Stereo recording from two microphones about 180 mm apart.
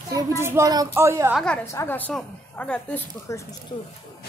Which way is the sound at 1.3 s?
5° left (ahead or behind).